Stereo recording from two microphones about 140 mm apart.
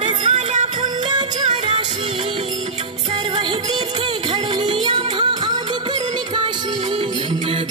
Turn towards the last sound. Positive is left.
turn(degrees=-40)  # may be behind; listen again after turning